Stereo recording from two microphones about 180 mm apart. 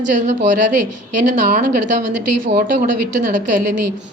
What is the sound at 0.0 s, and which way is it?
A woman's voice, 45° right (ahead or behind).